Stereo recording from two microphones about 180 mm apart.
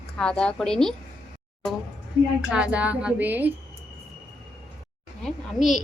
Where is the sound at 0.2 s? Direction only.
5° left (ahead or behind).